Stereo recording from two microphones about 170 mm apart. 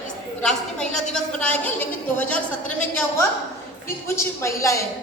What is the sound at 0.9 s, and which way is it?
Speech, 45° left (ahead or behind).